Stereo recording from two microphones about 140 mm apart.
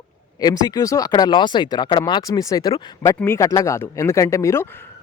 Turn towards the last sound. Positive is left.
turn(degrees=20)  # may be behind; listen again after turning